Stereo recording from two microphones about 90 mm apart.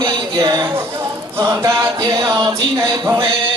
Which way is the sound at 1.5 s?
35° right (ahead or behind).